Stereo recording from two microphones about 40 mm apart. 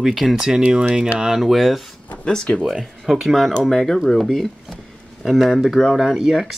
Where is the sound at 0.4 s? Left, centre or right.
Centre.